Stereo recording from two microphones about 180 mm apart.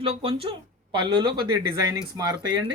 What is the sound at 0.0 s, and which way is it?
Speech, 30° right (ahead or behind).